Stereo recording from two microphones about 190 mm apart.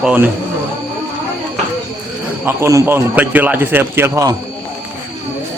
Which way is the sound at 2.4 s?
15° right (ahead or behind).